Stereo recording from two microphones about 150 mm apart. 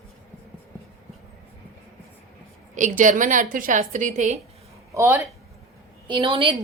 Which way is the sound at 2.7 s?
55° right (ahead or behind).